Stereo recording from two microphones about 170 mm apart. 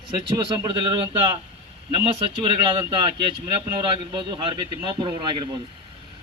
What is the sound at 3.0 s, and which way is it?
Speech, 30° right (ahead or behind).